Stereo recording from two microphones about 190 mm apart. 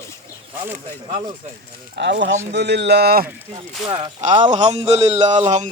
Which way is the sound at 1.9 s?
65° right (ahead or behind).